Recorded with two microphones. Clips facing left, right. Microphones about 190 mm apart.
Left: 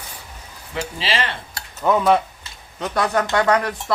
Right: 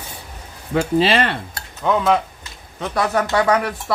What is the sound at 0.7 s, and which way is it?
Stir, 55° right (ahead or behind).